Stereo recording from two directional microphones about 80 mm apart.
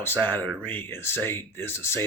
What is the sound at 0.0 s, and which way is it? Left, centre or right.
A man's voice, left.